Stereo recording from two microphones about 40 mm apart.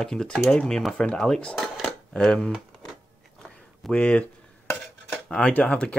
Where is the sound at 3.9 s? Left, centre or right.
Left.